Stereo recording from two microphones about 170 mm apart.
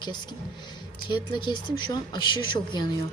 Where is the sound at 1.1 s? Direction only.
25° left (ahead or behind).